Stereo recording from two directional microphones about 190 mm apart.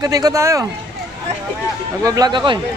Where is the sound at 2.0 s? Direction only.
20° right (ahead or behind).